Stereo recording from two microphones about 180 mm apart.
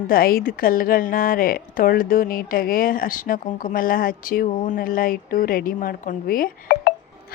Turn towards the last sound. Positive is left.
turn(degrees=55)  # may be behind; listen again after turning